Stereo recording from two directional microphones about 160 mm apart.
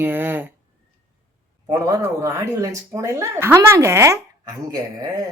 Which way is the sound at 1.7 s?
20° right (ahead or behind).